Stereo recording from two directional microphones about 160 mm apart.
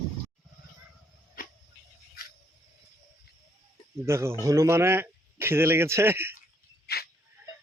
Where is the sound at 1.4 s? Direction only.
60° left (ahead or behind).